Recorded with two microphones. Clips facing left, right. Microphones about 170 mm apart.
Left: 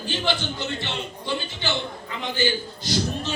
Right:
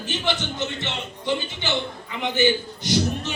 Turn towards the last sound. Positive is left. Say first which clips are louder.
# right 3 dB
turn(degrees=-20)  # may be behind; listen again after turning